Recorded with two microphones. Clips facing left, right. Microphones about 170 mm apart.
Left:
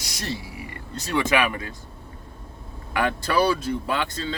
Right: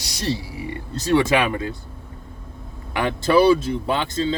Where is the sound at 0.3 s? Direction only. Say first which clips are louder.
Right 8 dB; 30° right (ahead or behind).